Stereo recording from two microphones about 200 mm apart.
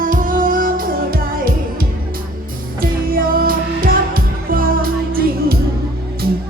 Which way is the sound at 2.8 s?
45° right (ahead or behind).